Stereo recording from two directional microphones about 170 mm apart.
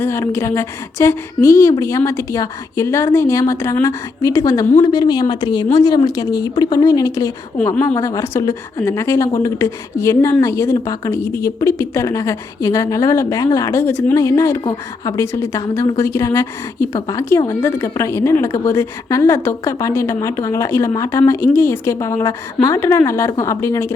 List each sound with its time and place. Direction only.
0.0 s speech: 15° left (ahead or behind)